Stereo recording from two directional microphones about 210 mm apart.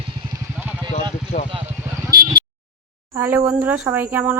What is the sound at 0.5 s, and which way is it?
Vehicle, 5° right (ahead or behind).